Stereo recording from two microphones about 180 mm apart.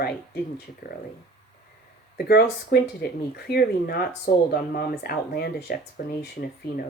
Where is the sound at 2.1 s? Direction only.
60° left (ahead or behind).